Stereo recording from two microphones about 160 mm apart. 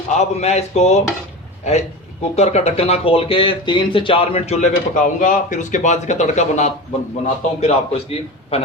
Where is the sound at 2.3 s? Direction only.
40° left (ahead or behind).